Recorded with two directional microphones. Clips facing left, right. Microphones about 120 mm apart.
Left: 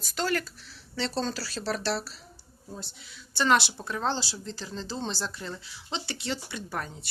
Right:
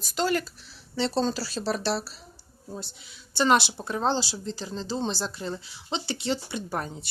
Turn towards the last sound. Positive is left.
turn(degrees=-20)  # may be behind; listen again after turning